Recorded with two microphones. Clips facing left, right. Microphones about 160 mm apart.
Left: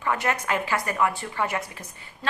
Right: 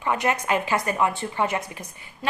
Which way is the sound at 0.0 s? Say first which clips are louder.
Right 2 dB; 20° right (ahead or behind).